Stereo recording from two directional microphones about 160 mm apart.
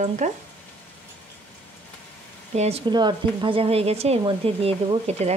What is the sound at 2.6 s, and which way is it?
Speech, 35° right (ahead or behind).